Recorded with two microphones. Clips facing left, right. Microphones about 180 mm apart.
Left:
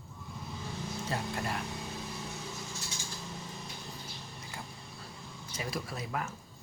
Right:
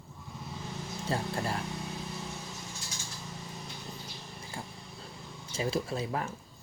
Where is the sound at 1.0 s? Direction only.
30° right (ahead or behind).